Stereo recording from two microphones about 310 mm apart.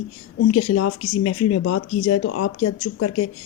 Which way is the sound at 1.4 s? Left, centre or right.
Left.